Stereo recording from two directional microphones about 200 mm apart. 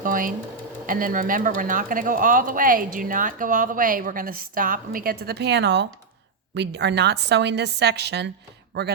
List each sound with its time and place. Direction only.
0.0 s sewing machine: 45° right (ahead or behind)
0.9 s a man's voice: 45° right (ahead or behind)